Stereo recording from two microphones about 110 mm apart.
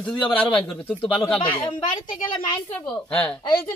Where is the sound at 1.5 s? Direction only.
50° left (ahead or behind).